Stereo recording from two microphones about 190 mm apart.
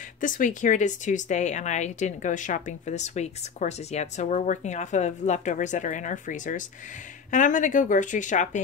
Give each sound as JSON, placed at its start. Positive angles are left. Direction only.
{"t": 0.2, "sound": "speech", "side_deg": 45}